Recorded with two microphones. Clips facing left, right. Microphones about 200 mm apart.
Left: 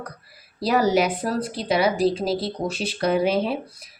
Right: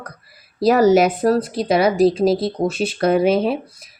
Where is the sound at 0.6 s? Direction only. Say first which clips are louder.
Right 7 dB; 45° right (ahead or behind).